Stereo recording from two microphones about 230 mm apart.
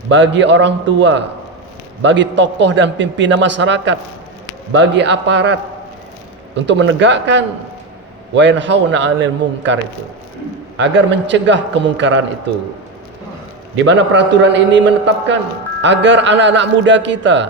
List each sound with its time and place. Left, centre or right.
0.1 s a man's voice: right
6.7 s a man's voice: right
10.8 s a man's voice: right
13.7 s a man's voice: right